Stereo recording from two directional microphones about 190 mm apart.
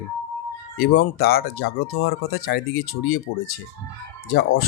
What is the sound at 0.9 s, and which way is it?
Speech, 55° left (ahead or behind).